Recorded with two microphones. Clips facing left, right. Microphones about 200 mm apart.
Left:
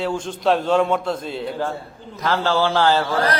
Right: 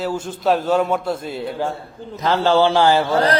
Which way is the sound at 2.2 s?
20° right (ahead or behind).